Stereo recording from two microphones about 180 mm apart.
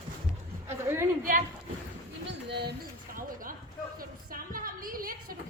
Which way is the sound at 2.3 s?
70° right (ahead or behind).